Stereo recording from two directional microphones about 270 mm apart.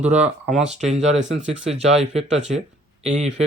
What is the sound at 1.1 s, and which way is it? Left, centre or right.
Speech, right.